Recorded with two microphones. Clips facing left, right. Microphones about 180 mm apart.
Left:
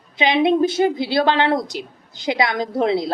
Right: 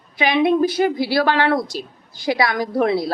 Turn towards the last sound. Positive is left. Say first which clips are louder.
# right 1 dB
turn(degrees=20)  # may be behind; listen again after turning